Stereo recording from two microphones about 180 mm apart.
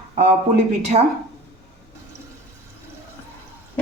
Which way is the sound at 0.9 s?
35° right (ahead or behind).